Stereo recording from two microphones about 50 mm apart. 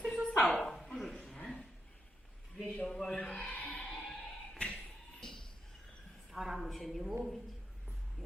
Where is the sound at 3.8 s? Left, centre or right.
Centre.